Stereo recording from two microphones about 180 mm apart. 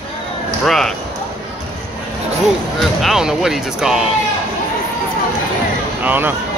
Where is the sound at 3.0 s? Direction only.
5° right (ahead or behind).